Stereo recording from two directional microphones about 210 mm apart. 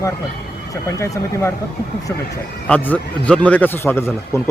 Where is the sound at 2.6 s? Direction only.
5° left (ahead or behind).